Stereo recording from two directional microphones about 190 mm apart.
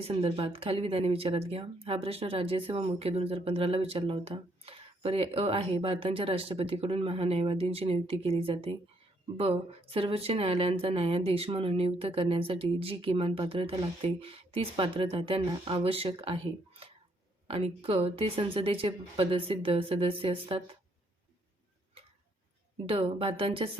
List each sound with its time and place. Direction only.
0.0 s speech: 30° right (ahead or behind)
22.9 s speech: 30° right (ahead or behind)